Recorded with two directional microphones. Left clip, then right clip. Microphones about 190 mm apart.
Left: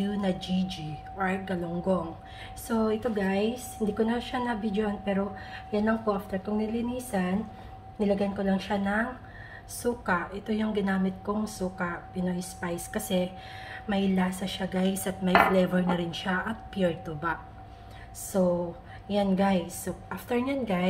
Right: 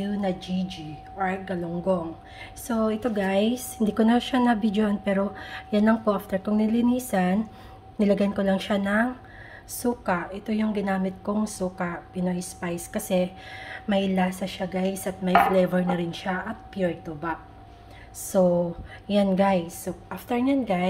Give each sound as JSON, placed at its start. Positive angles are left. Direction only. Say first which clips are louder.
{"t": 0.0, "sound": "speech", "louder": "right 2 dB", "side_deg": -25}
{"t": 2.7, "sound": "a woman's voice", "louder": "right 2 dB", "side_deg": -35}
{"t": 9.8, "sound": "a woman's voice", "louder": "right 2 dB", "side_deg": -35}
{"t": 14.5, "sound": "speech", "louder": "right 2 dB", "side_deg": -25}
{"t": 18.3, "sound": "a woman's voice", "louder": "right 5 dB", "side_deg": -40}